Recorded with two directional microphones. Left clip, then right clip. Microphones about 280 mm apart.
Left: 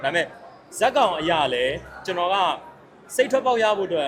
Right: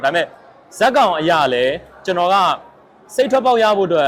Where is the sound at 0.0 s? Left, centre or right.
Right.